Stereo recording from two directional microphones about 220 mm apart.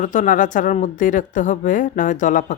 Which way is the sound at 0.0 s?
35° left (ahead or behind).